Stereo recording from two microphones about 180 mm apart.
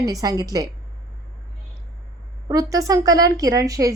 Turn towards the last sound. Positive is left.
turn(degrees=-20)  # may be behind; listen again after turning